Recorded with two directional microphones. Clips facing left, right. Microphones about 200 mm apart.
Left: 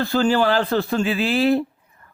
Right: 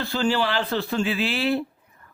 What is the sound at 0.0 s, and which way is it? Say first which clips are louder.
A man's voice: left 5 dB; 45° left (ahead or behind).